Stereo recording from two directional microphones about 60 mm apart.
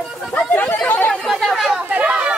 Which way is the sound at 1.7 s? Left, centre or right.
Centre.